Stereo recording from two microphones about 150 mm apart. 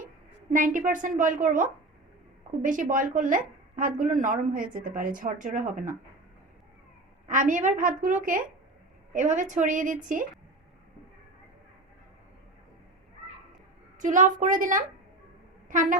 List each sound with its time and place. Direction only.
0.5 s a woman's voice: 65° right (ahead or behind)
7.3 s a woman's voice: 60° right (ahead or behind)
14.0 s a woman's voice: 60° right (ahead or behind)